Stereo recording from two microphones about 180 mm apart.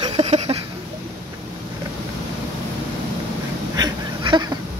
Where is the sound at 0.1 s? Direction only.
35° right (ahead or behind).